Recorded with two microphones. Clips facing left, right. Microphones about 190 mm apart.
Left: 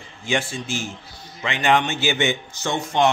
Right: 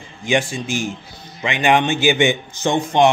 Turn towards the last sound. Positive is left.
turn(degrees=-15)  # may be behind; listen again after turning